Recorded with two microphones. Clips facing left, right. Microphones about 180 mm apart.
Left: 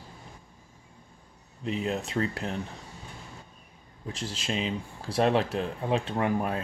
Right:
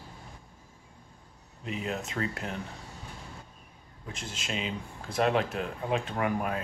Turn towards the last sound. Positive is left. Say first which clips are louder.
# left 2 dB
turn(degrees=30)  # may be behind; listen again after turning